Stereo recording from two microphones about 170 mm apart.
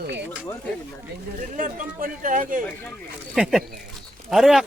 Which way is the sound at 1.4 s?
50° right (ahead or behind).